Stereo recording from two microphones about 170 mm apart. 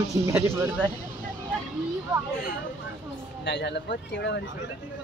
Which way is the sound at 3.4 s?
80° left.